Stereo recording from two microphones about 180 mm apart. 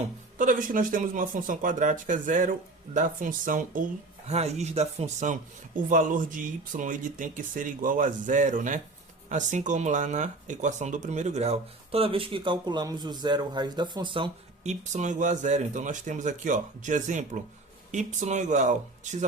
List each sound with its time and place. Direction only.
0.3 s speech: 50° right (ahead or behind)
4.3 s speech: 35° right (ahead or behind)